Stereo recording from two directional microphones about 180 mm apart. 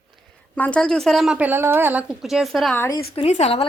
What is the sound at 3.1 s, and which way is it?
Speech, 35° left (ahead or behind).